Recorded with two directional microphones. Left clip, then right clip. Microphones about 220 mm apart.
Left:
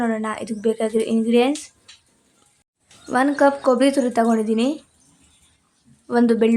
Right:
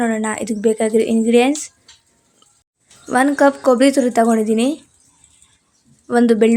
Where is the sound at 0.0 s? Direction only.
20° right (ahead or behind).